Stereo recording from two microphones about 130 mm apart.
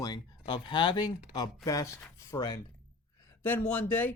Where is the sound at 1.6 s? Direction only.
25° left (ahead or behind).